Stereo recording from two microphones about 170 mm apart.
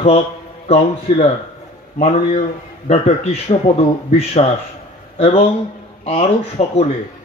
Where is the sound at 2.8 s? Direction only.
35° left (ahead or behind).